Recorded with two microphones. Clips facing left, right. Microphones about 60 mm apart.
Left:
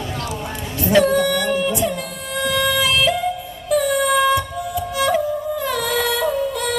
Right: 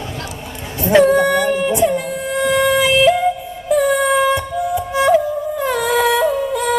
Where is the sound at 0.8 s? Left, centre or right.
Right.